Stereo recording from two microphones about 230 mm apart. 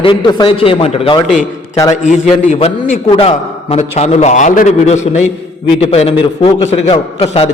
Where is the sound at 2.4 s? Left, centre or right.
Left.